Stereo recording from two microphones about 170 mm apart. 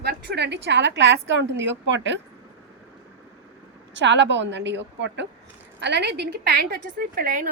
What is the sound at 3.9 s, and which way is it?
A woman's voice, 90° right.